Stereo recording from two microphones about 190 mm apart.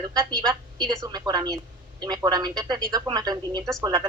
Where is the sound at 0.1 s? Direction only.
20° right (ahead or behind).